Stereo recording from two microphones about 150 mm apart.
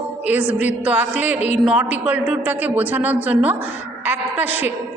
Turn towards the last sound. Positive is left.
turn(degrees=-10)  # may be behind; listen again after turning